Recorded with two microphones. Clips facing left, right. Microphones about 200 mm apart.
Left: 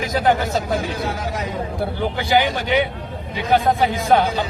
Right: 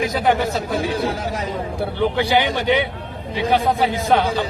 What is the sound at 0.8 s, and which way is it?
Speech, 30° right (ahead or behind).